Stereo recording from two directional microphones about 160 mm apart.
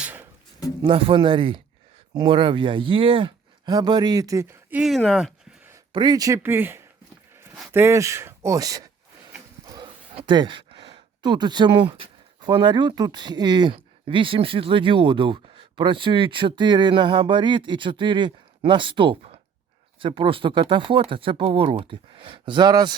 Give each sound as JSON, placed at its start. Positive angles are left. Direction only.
{"t": 0.0, "sound": "a sound", "side_deg": -10}
{"t": 0.8, "sound": "speech", "side_deg": -35}
{"t": 4.8, "sound": "speech", "side_deg": 0}
{"t": 5.9, "sound": "speech", "side_deg": -25}
{"t": 9.6, "sound": "a sound", "side_deg": -25}
{"t": 10.2, "sound": "speech", "side_deg": -30}